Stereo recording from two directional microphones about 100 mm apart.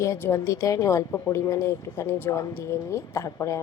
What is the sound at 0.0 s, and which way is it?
Speech, 30° left (ahead or behind).